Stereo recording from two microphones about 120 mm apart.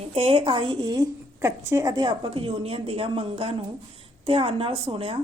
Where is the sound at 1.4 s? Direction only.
25° right (ahead or behind).